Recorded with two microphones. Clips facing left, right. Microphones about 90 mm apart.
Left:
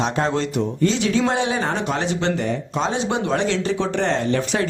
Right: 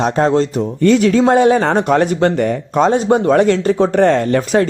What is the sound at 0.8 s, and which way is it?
Speech, 50° right (ahead or behind).